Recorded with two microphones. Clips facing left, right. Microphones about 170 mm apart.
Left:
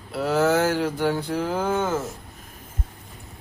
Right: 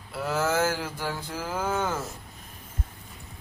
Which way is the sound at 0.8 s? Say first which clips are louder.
Left 10 dB; 65° left (ahead or behind).